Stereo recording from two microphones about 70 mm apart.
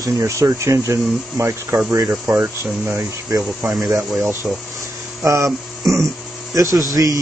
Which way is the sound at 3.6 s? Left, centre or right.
Centre.